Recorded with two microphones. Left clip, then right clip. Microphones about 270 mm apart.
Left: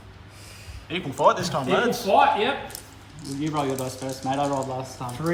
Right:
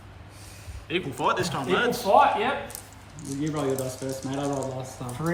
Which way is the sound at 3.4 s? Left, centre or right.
Left.